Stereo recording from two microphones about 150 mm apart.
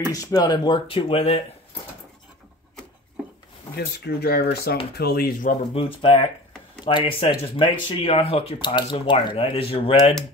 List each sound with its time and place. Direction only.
0.0 s speech: 25° left (ahead or behind); by 1.4 s 40° left (ahead or behind)
3.7 s speech: 90° left; by 5.6 s 75° left (ahead or behind)
5.8 s speech: 35° left (ahead or behind)